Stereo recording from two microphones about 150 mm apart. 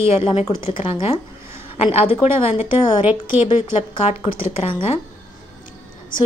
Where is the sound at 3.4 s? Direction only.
40° left (ahead or behind).